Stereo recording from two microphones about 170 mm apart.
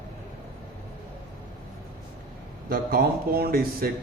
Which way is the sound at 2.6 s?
60° right (ahead or behind).